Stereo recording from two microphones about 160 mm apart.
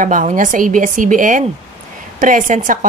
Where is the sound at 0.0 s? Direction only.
55° right (ahead or behind).